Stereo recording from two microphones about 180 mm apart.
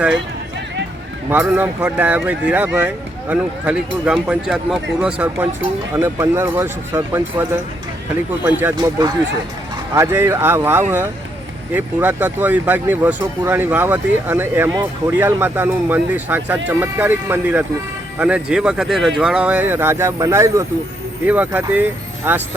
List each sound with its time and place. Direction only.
1.3 s speech: 10° right (ahead or behind)
8.4 s speech: 10° right (ahead or behind)
8.7 s speech: 20° right (ahead or behind)